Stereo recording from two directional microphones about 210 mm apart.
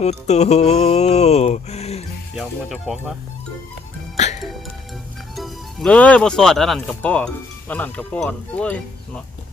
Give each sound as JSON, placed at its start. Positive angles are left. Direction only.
{"t": 0.0, "sound": "mantra", "side_deg": 30}
{"t": 2.3, "sound": "speech", "side_deg": 0}
{"t": 5.4, "sound": "speech", "side_deg": 5}